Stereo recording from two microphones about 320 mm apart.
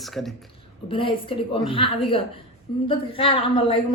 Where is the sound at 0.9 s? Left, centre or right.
Centre.